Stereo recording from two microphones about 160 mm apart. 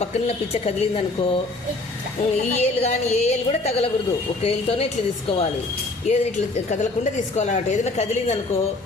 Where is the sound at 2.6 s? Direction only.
45° left (ahead or behind).